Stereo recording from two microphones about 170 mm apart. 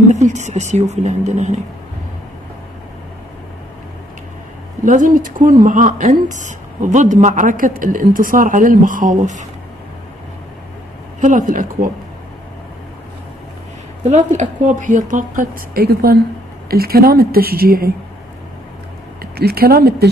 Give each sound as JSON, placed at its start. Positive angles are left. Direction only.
{"t": 0.1, "sound": "speech", "side_deg": -45}
{"t": 4.8, "sound": "speech", "side_deg": -50}
{"t": 11.1, "sound": "speech", "side_deg": -50}
{"t": 14.0, "sound": "a woman's voice", "side_deg": -45}
{"t": 19.3, "sound": "a woman's voice", "side_deg": -65}